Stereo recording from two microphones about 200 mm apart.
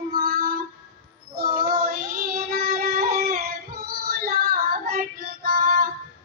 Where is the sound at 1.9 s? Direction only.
45° right (ahead or behind).